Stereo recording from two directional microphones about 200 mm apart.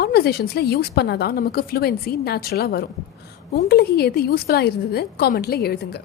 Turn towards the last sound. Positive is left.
turn(degrees=55)  # may be behind; listen again after turning